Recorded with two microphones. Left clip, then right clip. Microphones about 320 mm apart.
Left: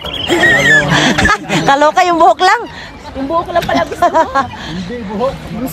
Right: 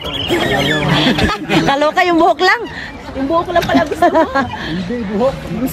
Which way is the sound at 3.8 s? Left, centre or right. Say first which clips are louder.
Left 1 dB; left.